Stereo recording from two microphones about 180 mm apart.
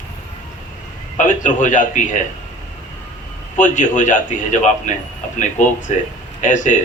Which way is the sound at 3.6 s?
45° left (ahead or behind).